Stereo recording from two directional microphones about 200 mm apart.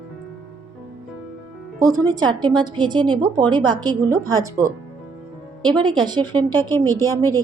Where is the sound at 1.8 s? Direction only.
15° right (ahead or behind).